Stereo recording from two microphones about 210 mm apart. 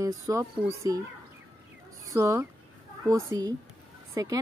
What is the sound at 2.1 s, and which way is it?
Speech, 15° right (ahead or behind).